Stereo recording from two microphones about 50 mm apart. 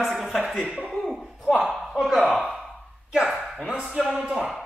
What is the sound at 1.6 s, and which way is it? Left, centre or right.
Speech, centre.